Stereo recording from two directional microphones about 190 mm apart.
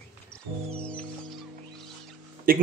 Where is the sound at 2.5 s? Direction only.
50° right (ahead or behind).